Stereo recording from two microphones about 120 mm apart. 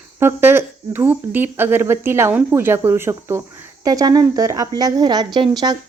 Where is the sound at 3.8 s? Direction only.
30° right (ahead or behind).